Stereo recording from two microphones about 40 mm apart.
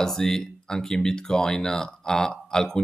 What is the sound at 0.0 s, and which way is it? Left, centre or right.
Speech, centre.